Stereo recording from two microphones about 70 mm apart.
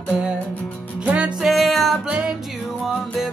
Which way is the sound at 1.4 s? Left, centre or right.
Centre.